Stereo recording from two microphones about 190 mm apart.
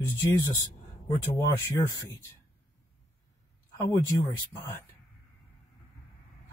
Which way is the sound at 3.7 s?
15° left (ahead or behind).